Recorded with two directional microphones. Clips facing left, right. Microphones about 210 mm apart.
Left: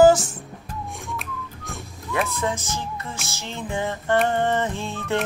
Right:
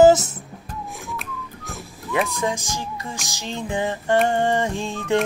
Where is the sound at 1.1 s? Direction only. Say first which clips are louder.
Even; centre (ahead or behind).